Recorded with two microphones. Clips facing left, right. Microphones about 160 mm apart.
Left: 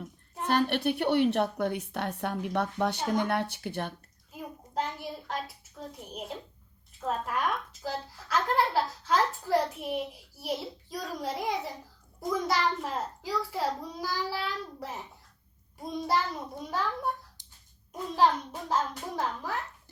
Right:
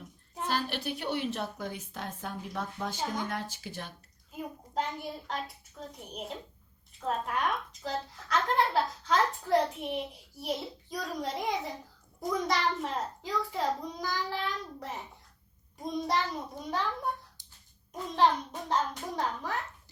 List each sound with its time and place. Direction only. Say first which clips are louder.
0.4 s a woman's voice: left 6 dB; 55° left (ahead or behind)
4.3 s a sound: right 2 dB; centre (ahead or behind)
7.0 s a woman's voice: left 1 dB; centre (ahead or behind)